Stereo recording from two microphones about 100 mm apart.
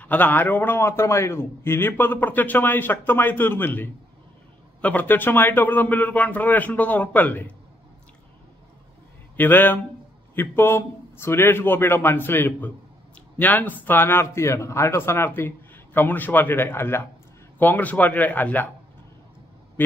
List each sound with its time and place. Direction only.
0.0 s a man's voice: 15° left (ahead or behind)
9.4 s a man's voice: 20° left (ahead or behind)